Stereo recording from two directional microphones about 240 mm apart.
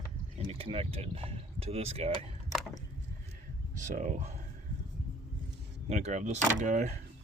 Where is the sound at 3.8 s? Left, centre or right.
Right.